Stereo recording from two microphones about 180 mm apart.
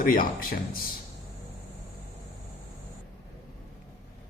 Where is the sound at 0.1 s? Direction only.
50° left (ahead or behind).